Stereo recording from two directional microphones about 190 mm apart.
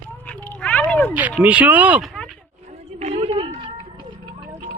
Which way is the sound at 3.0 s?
30° right (ahead or behind).